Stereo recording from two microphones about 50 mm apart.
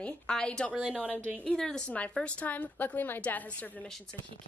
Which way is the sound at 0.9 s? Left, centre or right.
Left.